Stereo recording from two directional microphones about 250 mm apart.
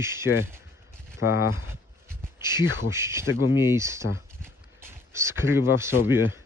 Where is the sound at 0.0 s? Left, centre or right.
Centre.